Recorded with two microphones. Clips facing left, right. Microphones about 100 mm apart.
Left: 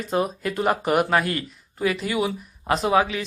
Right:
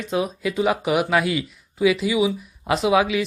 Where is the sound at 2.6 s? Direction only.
40° left (ahead or behind).